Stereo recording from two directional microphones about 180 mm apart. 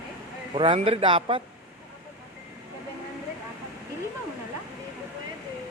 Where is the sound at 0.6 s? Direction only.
30° right (ahead or behind).